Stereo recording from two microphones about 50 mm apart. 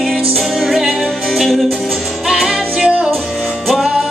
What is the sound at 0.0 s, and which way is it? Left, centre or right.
Music, centre.